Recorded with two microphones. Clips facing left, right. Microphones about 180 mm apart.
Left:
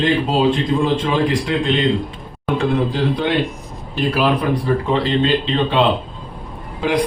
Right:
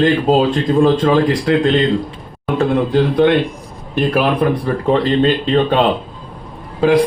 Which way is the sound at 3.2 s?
55° right (ahead or behind).